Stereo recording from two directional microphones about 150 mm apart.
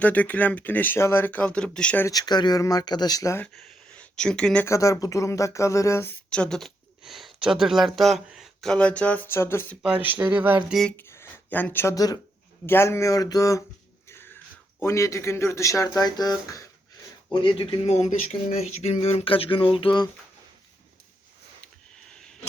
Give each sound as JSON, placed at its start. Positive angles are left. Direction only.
{"t": 0.0, "sound": "speech", "side_deg": 10}
{"t": 2.0, "sound": "speech", "side_deg": 25}
{"t": 3.9, "sound": "speech", "side_deg": 5}
{"t": 4.6, "sound": "speech", "side_deg": 20}
{"t": 9.8, "sound": "speech", "side_deg": -10}
{"t": 10.8, "sound": "speech", "side_deg": 5}
{"t": 14.1, "sound": "wheeze", "side_deg": 15}
{"t": 14.8, "sound": "speech", "side_deg": 20}
{"t": 17.3, "sound": "speech", "side_deg": 35}